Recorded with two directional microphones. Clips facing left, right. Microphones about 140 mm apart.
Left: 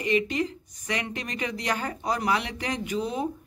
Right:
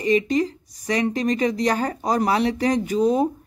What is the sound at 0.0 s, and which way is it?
Speech, 35° right (ahead or behind).